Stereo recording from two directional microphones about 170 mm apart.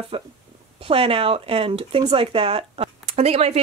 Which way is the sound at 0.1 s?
30° right (ahead or behind).